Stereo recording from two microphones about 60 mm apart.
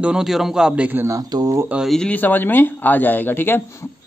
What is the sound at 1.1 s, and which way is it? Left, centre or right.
Speech, right.